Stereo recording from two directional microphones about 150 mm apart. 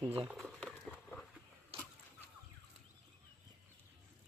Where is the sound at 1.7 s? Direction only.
40° right (ahead or behind).